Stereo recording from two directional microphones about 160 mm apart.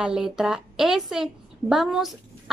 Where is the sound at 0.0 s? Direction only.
5° right (ahead or behind).